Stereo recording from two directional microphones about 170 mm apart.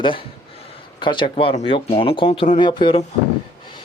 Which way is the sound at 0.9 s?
30° left (ahead or behind).